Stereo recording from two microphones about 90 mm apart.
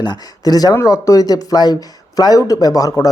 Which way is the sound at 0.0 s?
50° left (ahead or behind).